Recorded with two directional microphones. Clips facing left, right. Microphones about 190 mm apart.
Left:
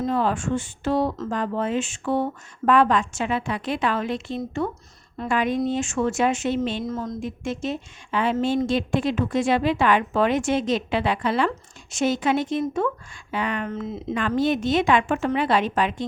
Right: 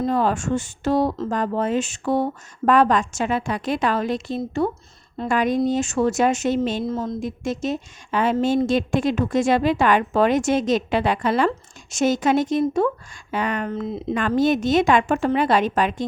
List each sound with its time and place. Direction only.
0.0 s a woman's voice: 40° right (ahead or behind)
6.8 s a woman's voice: 30° right (ahead or behind)